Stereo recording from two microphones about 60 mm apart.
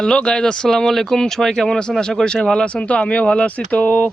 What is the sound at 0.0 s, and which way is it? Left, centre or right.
Speech, centre.